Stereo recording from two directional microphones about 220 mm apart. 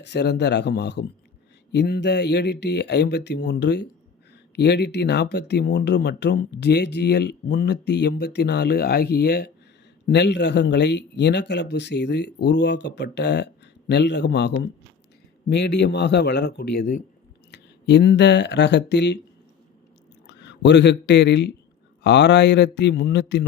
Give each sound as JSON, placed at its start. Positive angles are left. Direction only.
{"t": 0.0, "sound": "speech", "side_deg": 50}
{"t": 20.2, "sound": "speech", "side_deg": 50}